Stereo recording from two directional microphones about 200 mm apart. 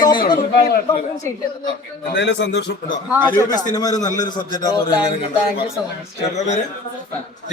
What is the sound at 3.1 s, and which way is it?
Speech, 10° right (ahead or behind).